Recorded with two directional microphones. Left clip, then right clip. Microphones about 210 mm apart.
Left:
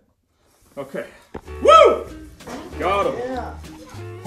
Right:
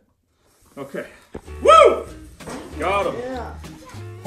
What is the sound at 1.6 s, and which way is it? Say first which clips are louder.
Music: even; 50° left (ahead or behind).